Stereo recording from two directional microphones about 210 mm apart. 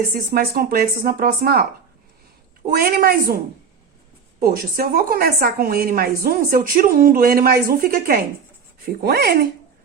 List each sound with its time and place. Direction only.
0.1 s a woman's voice: 45° right (ahead or behind)
2.6 s a woman's voice: 45° right (ahead or behind)